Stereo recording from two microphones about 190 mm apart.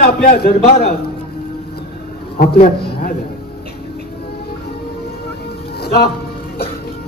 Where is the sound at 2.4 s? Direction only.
50° left (ahead or behind).